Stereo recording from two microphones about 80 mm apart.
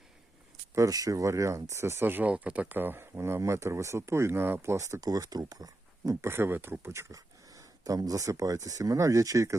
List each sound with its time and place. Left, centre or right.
0.8 s speech: right
6.2 s speech: right